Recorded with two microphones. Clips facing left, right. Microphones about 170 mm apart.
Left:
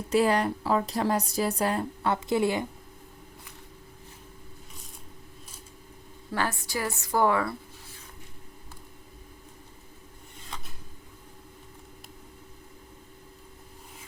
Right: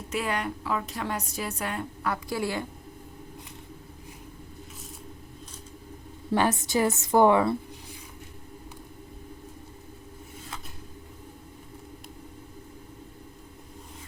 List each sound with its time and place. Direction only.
0.1 s a woman's voice: 35° left (ahead or behind)
2.3 s a woman's voice: 20° left (ahead or behind)
6.3 s a woman's voice: 20° right (ahead or behind)